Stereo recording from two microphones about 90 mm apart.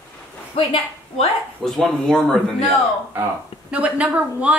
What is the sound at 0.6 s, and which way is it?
Speech, 90° left.